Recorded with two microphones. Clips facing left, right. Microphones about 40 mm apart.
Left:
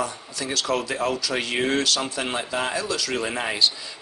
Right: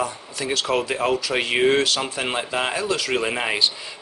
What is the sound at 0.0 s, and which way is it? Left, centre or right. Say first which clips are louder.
Speech: right 2 dB; right.